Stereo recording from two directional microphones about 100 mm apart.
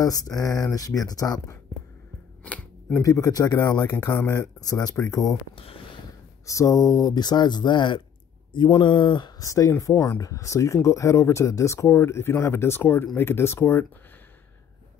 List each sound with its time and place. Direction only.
0.0 s speech: 35° left (ahead or behind)
2.9 s speech: 30° left (ahead or behind)
4.0 s speech: 25° left (ahead or behind)
5.6 s speech: 65° left (ahead or behind)
6.4 s speech: 35° left (ahead or behind); by 9.3 s 50° left (ahead or behind)
9.4 s speech: 35° left (ahead or behind)